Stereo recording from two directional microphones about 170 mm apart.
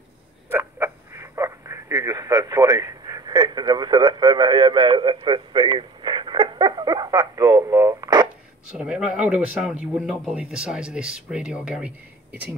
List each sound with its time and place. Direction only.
0.5 s speech: 15° right (ahead or behind)
8.7 s speech: 5° right (ahead or behind)